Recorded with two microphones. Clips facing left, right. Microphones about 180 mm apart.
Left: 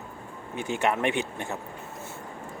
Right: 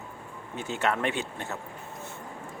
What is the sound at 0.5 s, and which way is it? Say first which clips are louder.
Speech: left 2 dB; 15° left (ahead or behind).